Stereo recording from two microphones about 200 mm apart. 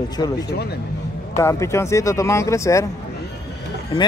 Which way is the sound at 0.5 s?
55° left (ahead or behind).